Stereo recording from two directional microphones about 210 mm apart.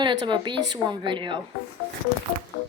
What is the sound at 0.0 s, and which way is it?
Speech, 20° right (ahead or behind).